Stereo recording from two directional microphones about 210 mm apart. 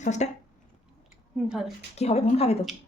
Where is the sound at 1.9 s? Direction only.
30° left (ahead or behind).